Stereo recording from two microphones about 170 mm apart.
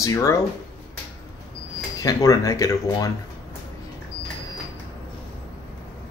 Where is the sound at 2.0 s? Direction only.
20° left (ahead or behind).